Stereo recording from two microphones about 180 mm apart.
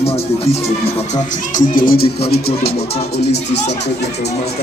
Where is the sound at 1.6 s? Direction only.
50° left (ahead or behind); by 3.6 s 70° left (ahead or behind).